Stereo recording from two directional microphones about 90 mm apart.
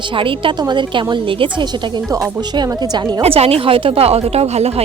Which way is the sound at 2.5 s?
50° right (ahead or behind).